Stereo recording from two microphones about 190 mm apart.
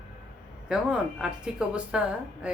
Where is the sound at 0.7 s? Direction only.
5° right (ahead or behind).